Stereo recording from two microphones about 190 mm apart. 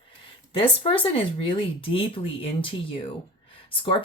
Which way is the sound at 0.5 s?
30° left (ahead or behind).